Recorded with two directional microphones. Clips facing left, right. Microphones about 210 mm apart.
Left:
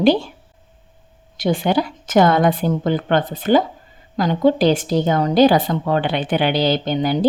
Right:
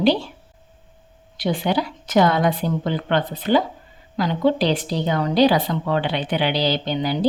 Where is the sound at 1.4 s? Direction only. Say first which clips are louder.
Left 3 dB; 45° left (ahead or behind).